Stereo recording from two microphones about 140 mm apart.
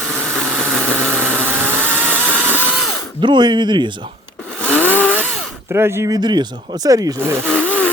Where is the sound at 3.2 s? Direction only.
30° right (ahead or behind).